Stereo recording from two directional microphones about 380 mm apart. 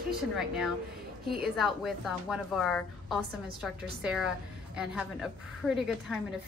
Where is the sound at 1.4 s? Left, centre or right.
Centre.